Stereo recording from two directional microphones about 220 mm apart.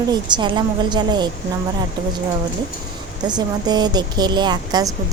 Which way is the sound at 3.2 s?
20° right (ahead or behind).